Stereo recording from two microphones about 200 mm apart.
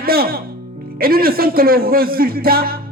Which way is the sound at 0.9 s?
50° right (ahead or behind).